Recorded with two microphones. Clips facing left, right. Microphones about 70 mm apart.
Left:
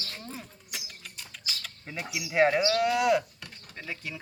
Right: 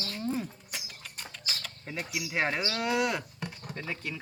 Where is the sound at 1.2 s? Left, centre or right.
Right.